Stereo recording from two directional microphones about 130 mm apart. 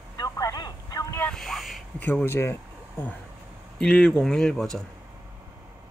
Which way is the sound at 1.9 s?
15° left (ahead or behind).